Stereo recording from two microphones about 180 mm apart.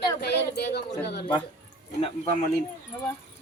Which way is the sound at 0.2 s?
65° left (ahead or behind).